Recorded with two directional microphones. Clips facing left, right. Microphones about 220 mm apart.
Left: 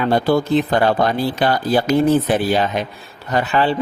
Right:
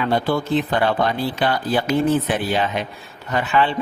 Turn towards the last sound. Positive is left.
turn(degrees=35)  # may be behind; listen again after turning